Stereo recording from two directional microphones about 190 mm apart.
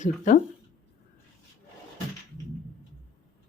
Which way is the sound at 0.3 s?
45° left (ahead or behind).